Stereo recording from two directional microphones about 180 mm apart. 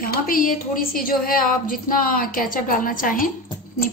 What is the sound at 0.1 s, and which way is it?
A woman's voice, 50° left (ahead or behind).